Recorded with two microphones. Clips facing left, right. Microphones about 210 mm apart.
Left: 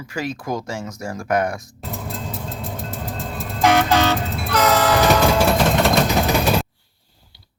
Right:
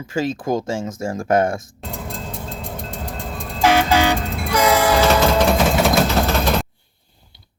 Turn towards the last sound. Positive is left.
turn(degrees=5)  # may be behind; listen again after turning